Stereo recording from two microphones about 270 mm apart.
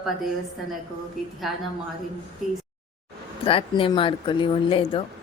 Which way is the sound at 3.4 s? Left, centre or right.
Centre.